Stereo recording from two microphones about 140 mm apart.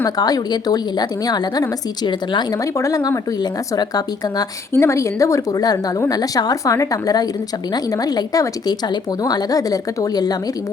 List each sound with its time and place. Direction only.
0.0 s speech: 25° left (ahead or behind)